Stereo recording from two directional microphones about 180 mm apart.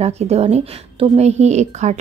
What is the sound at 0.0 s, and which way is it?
A woman's voice, 35° right (ahead or behind).